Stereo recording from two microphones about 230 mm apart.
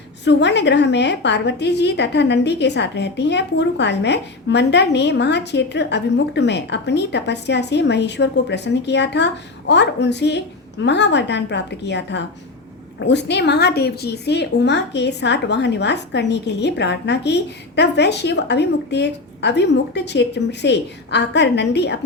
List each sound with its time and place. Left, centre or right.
0.3 s a woman's voice: left